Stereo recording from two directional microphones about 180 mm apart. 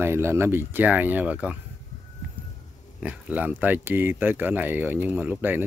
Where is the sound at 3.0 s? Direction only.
10° right (ahead or behind).